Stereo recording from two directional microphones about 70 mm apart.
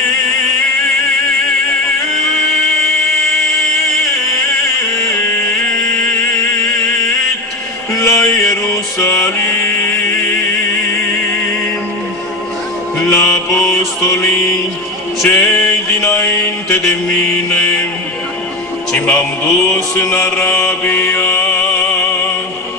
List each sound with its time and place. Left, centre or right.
7.9 s a sound: left
8.9 s mantra: left
13.0 s music: left
15.2 s mantra: left
18.9 s mantra: left